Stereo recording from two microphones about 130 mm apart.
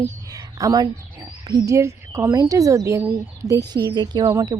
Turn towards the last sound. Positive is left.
turn(degrees=-30)  # may be behind; listen again after turning